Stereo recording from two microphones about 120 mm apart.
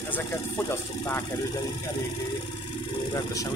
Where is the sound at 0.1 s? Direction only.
20° left (ahead or behind).